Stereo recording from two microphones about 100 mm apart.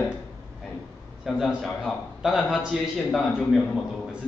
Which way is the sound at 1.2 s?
Centre (ahead or behind).